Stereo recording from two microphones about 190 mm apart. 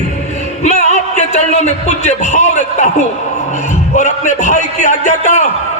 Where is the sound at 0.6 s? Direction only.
35° left (ahead or behind).